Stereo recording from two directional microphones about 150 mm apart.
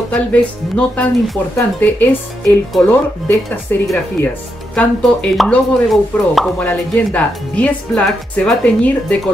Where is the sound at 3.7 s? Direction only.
15° left (ahead or behind).